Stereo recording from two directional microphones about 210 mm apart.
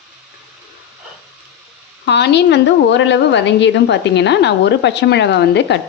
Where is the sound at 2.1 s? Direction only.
55° left (ahead or behind).